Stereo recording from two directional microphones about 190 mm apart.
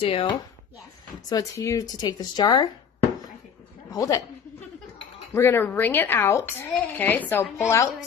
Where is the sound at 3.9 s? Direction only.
20° left (ahead or behind).